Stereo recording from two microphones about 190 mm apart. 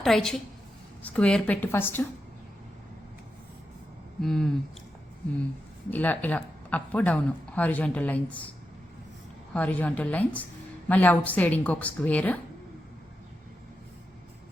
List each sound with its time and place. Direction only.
0.0 s a woman's voice: centre (ahead or behind)
4.2 s a woman's voice: centre (ahead or behind)
5.9 s speech: 10° left (ahead or behind)
9.5 s speech: 10° left (ahead or behind)